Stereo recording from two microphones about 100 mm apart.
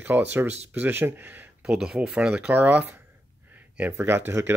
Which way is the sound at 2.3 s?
20° right (ahead or behind).